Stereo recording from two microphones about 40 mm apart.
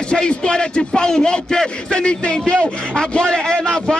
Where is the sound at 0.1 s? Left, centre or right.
Left.